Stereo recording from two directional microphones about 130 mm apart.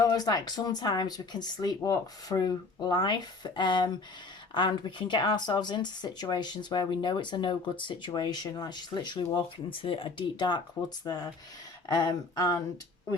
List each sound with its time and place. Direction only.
0.0 s speech: 30° left (ahead or behind)